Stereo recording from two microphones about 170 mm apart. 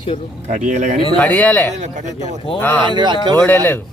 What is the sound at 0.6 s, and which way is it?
Speech, 45° right (ahead or behind).